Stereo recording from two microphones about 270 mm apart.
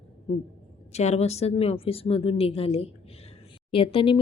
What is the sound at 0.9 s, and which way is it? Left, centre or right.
A woman's voice, left.